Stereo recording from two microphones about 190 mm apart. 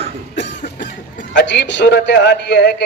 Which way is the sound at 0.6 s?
40° left (ahead or behind).